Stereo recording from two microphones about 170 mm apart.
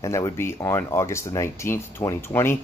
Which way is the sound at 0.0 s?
20° left (ahead or behind).